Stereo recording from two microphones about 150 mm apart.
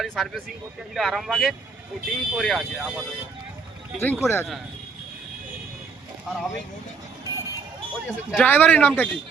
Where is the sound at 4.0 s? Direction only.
15° left (ahead or behind).